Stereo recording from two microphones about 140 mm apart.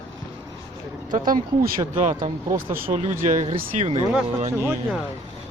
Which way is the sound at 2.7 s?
75° right (ahead or behind).